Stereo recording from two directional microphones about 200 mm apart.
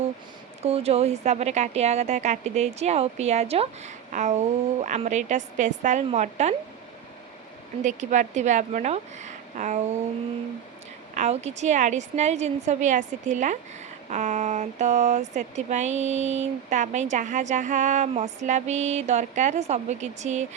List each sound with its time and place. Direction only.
0.6 s speech: 30° right (ahead or behind)
7.8 s speech: 40° right (ahead or behind)
11.1 s speech: 35° right (ahead or behind)